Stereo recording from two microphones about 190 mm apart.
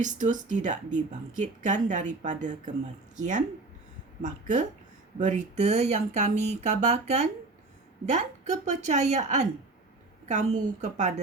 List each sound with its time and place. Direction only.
0.0 s speech: 40° right (ahead or behind)